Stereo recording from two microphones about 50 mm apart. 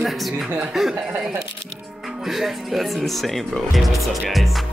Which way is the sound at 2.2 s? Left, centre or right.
Centre.